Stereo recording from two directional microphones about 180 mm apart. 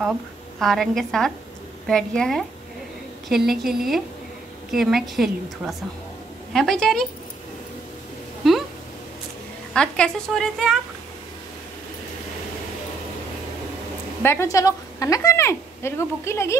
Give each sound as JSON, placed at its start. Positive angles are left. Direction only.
{"t": 0.6, "sound": "a woman's voice", "side_deg": 0}
{"t": 8.4, "sound": "a sound", "side_deg": 0}
{"t": 9.8, "sound": "a woman's voice", "side_deg": 5}
{"t": 14.2, "sound": "a woman's voice", "side_deg": 15}